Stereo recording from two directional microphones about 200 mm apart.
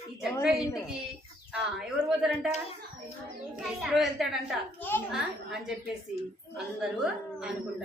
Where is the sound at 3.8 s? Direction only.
Centre (ahead or behind).